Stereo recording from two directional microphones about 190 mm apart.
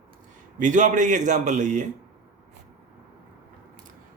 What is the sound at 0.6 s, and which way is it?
A man's voice, 40° right (ahead or behind).